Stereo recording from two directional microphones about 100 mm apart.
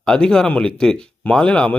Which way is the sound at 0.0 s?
10° left (ahead or behind).